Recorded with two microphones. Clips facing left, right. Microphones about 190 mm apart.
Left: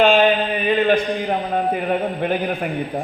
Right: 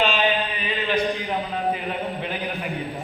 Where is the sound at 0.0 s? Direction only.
50° left (ahead or behind).